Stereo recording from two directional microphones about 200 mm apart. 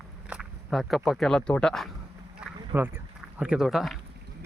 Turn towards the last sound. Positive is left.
turn(degrees=0)  # may be behind; listen again after turning